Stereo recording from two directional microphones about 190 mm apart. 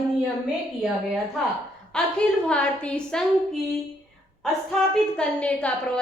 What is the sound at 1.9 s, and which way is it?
A woman's voice, 5° left (ahead or behind).